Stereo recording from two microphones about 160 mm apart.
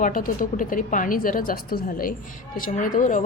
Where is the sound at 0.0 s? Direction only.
55° left (ahead or behind).